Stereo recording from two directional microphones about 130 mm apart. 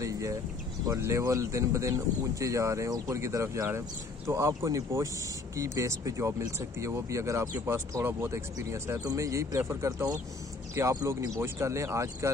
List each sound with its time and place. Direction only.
0.8 s speech: 25° right (ahead or behind)